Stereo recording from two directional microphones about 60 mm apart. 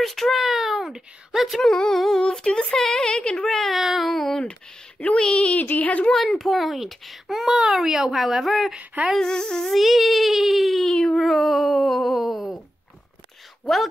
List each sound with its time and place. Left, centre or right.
0.0 s a child's voice: centre
1.7 s speech: centre
3.4 s a child's voice: centre
4.4 s speech: centre
6.1 s a child's voice: centre
8.7 s a sound: right
9.2 s a child's voice: centre
10.9 s speech: centre
11.1 s a child's voice: centre
13.7 s a child's voice: centre